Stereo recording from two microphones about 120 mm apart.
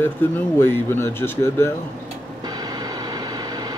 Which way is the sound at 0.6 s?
25° left (ahead or behind).